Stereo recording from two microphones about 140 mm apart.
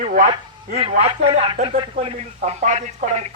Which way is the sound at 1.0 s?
45° right (ahead or behind).